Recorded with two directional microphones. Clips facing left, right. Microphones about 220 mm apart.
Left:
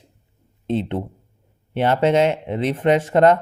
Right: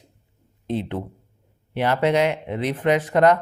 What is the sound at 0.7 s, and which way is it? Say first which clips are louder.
Speech: left 3 dB; 25° left (ahead or behind).